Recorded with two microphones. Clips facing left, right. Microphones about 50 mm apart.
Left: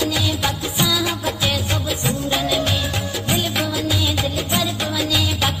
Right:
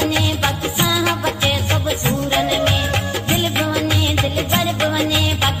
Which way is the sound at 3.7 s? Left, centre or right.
Right.